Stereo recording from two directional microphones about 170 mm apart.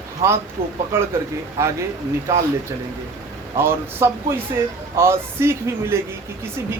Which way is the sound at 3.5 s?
15° right (ahead or behind).